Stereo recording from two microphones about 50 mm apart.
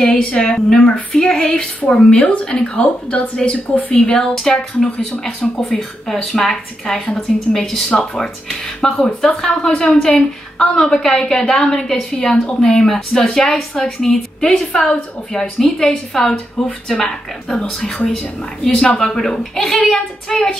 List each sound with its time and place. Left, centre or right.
0.0 s a woman's voice: centre
0.9 s a woman's voice: left
3.9 s a woman's voice: centre
5.8 s a woman's voice: centre